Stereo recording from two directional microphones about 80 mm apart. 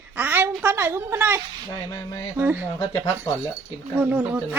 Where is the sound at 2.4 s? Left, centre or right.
Right.